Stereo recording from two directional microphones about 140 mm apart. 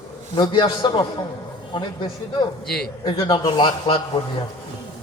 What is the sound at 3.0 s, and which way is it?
A man's voice, 30° left (ahead or behind).